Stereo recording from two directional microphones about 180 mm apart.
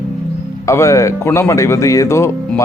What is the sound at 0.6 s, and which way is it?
Speech, 15° left (ahead or behind).